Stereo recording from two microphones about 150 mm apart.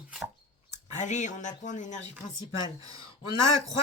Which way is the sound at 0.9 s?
55° left (ahead or behind).